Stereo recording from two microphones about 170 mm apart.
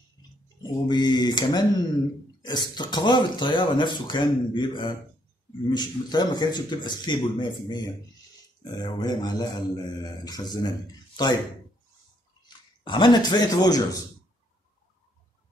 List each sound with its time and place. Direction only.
0.6 s speech: 25° left (ahead or behind)
12.4 s speech: 30° left (ahead or behind)